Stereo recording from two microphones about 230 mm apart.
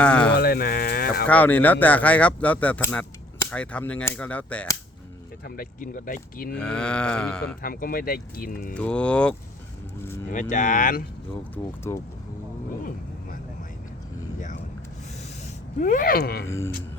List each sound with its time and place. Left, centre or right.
0.0 s a sound: centre
0.3 s speech: left
1.3 s speech: centre
5.5 s speech: left
6.5 s a sound: centre
7.6 s speech: left
8.7 s a sound: centre
10.0 s speech: centre
10.5 s speech: left
11.5 s speech: centre
15.8 s speech: left
16.5 s speech: centre